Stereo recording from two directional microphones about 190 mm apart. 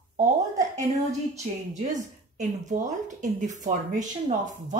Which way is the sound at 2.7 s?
40° right (ahead or behind).